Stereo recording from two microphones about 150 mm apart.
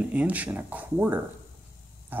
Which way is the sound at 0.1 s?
10° right (ahead or behind).